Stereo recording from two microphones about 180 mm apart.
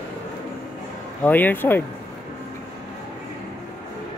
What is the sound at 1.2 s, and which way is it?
Speech, 10° left (ahead or behind).